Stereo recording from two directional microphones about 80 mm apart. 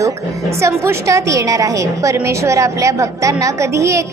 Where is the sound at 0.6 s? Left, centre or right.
Right.